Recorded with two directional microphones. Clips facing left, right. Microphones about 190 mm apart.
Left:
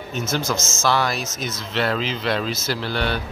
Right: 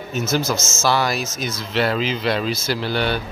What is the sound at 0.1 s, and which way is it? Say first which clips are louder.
Speech: right 4 dB; 5° right (ahead or behind).